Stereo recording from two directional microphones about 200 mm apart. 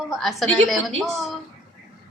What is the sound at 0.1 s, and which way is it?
A woman's voice, centre (ahead or behind).